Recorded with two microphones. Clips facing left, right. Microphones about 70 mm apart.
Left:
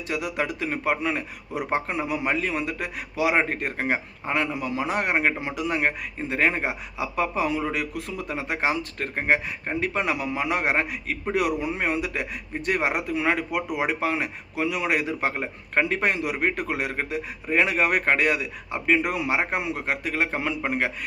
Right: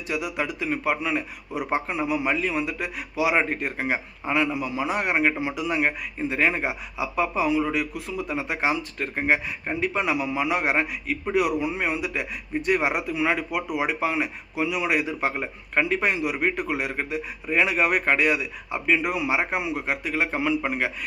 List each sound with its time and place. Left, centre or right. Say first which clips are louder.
0.1 s a man's voice: even; left